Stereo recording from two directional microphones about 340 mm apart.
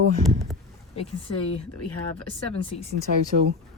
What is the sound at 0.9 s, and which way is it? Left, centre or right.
Speech, centre.